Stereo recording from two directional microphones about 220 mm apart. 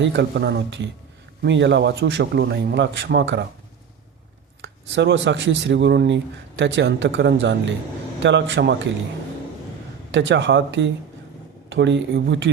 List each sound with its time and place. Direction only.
0.0 s speech: 50° right (ahead or behind)
4.6 s speech: 55° right (ahead or behind)
10.1 s speech: 55° right (ahead or behind)